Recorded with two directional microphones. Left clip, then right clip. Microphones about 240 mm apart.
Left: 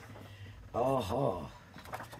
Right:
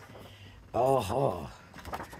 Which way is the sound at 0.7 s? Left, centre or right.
Right.